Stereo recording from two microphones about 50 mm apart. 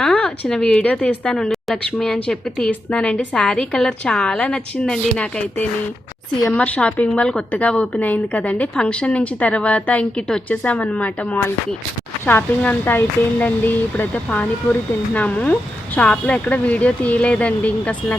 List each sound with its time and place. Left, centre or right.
0.0 s speech: centre
1.2 s a woman's voice: centre
6.5 s a woman's voice: left
12.2 s speech: left